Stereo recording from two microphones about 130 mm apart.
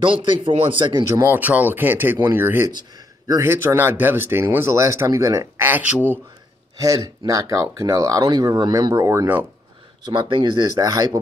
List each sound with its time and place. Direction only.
0.0 s speech: 40° right (ahead or behind)
1.0 s speech: 20° right (ahead or behind)
6.8 s speech: 25° right (ahead or behind)
10.1 s speech: 40° right (ahead or behind)